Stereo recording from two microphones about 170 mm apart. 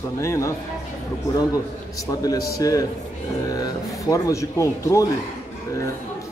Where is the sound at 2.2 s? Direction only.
20° left (ahead or behind).